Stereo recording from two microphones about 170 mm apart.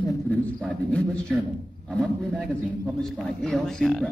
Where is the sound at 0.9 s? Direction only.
5° left (ahead or behind).